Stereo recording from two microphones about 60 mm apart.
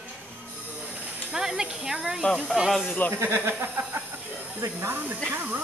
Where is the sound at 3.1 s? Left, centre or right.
Right.